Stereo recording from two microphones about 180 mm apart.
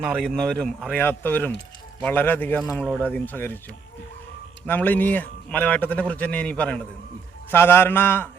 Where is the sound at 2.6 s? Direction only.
Centre (ahead or behind).